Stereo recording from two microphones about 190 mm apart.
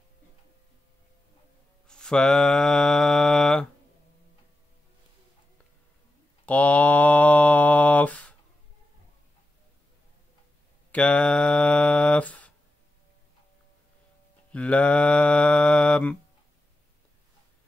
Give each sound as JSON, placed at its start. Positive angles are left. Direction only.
{"t": 1.9, "sound": "mantra", "side_deg": 5}
{"t": 6.4, "sound": "mantra", "side_deg": 5}
{"t": 10.9, "sound": "mantra", "side_deg": 5}
{"t": 14.5, "sound": "mantra", "side_deg": 5}